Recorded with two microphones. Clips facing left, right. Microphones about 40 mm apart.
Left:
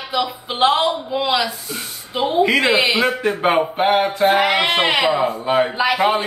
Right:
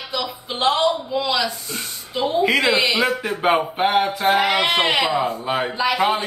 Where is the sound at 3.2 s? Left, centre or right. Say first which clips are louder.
Left 2 dB; centre.